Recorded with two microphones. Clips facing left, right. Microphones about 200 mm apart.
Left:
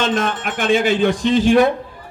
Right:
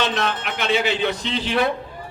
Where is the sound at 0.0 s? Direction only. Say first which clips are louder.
Left 4 dB; 50° left (ahead or behind).